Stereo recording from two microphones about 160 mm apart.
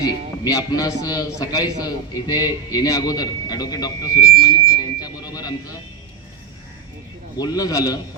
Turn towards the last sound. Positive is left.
turn(degrees=25)  # may be behind; listen again after turning